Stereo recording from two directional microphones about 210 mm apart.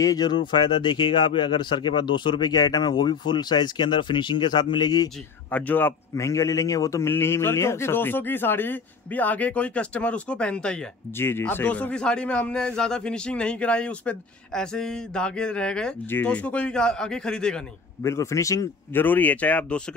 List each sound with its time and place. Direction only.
0.0 s speech: 20° left (ahead or behind)
5.5 s a man's voice: 10° left (ahead or behind)
18.1 s speech: 15° left (ahead or behind)